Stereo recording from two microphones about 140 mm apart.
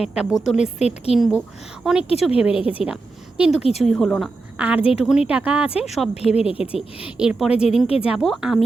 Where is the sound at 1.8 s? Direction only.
5° right (ahead or behind).